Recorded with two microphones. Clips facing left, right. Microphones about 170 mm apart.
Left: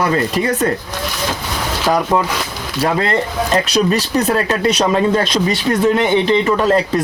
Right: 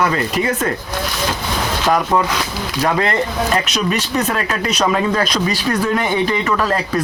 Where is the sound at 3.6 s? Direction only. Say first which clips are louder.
Left 4 dB; 35° left (ahead or behind).